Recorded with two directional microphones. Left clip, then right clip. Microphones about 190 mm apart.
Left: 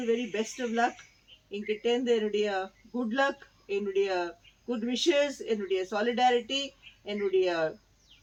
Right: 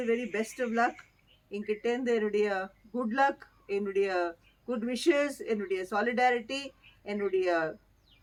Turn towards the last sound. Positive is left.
turn(degrees=-5)  # may be behind; listen again after turning